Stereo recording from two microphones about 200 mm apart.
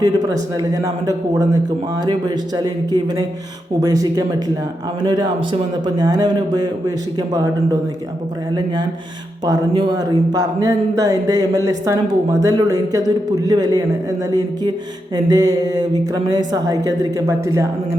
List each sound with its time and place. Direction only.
0.0 s speech: 20° right (ahead or behind)